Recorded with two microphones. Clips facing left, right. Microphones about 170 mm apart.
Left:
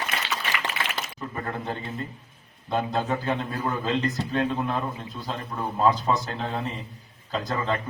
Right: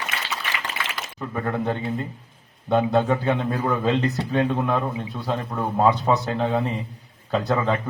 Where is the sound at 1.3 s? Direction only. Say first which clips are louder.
Right 9 dB; 55° right (ahead or behind).